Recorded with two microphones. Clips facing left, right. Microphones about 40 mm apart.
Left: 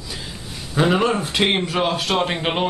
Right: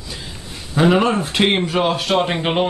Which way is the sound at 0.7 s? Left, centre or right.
Centre.